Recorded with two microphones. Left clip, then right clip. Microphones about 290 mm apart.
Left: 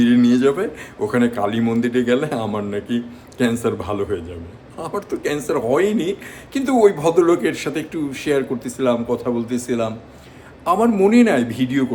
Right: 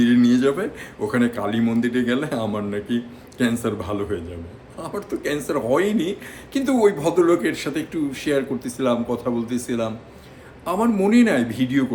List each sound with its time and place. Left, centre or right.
0.0 s a man's voice: centre